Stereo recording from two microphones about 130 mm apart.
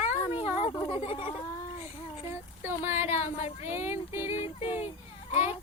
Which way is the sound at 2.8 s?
15° right (ahead or behind).